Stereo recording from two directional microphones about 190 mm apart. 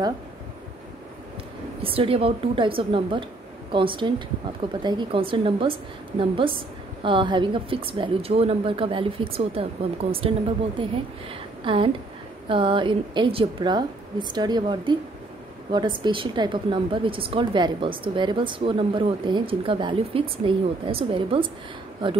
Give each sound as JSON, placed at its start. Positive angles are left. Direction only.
{"t": 1.8, "sound": "a woman's voice", "side_deg": -30}